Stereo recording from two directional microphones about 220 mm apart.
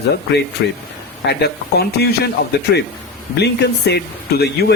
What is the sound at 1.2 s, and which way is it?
Speech, 45° left (ahead or behind).